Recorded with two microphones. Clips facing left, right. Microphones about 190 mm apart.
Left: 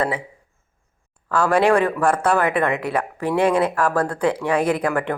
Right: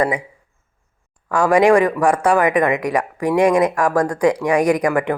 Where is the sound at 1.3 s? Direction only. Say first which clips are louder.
Right 4 dB; 15° right (ahead or behind).